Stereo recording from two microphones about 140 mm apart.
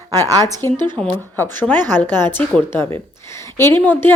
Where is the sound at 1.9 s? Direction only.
15° left (ahead or behind).